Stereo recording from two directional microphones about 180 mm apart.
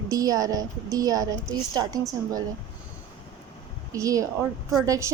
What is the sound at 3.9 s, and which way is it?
A woman's voice, 20° right (ahead or behind).